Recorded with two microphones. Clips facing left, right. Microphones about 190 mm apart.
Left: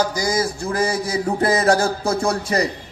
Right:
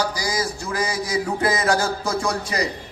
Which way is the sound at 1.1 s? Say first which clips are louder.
Left 1 dB; 30° left (ahead or behind).